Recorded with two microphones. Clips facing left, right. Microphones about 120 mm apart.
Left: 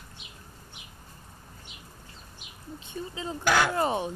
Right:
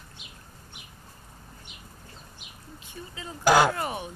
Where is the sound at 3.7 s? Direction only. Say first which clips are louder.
Left 5 dB; 25° left (ahead or behind).